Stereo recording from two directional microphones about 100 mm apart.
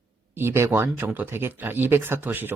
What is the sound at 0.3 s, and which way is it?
Speech, 25° right (ahead or behind).